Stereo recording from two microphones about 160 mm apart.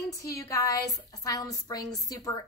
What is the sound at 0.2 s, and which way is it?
A woman's voice, 20° left (ahead or behind).